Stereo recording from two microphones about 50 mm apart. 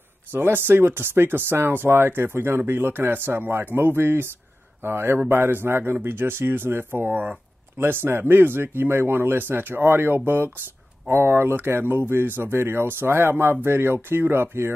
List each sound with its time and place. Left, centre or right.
0.3 s speech: right